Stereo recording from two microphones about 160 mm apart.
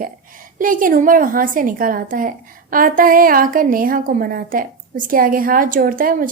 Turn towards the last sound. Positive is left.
turn(degrees=-60)  # may be behind; listen again after turning